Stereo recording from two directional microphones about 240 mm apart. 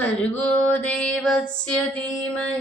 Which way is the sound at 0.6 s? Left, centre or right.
Centre.